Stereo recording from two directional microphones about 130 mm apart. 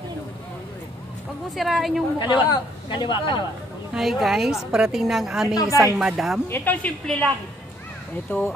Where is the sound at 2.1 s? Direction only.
35° left (ahead or behind).